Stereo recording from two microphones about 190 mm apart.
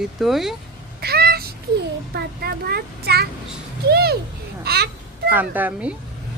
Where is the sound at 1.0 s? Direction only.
55° right (ahead or behind).